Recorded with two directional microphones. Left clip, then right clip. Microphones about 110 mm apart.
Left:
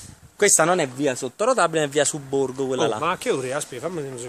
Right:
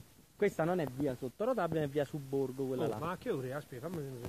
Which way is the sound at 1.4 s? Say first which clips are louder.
Left 14 dB; 10° right (ahead or behind).